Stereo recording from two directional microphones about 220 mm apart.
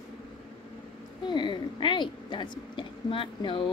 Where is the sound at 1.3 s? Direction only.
20° left (ahead or behind).